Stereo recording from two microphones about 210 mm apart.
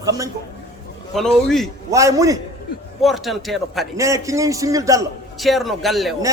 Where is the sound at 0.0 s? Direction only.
15° right (ahead or behind).